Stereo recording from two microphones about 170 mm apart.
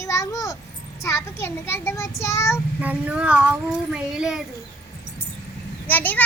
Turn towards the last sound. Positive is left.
turn(degrees=10)  # may be behind; listen again after turning